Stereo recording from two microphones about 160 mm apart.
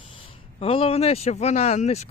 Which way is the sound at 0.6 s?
35° left (ahead or behind).